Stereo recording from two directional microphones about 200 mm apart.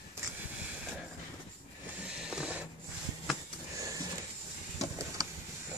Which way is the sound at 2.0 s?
5° right (ahead or behind).